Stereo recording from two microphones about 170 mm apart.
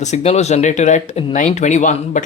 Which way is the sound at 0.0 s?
40° left (ahead or behind).